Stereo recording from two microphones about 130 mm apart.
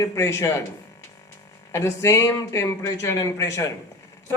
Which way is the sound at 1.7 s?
20° left (ahead or behind).